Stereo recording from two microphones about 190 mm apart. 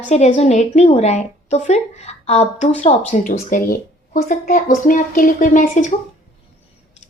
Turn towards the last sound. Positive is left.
turn(degrees=40)  # may be behind; listen again after turning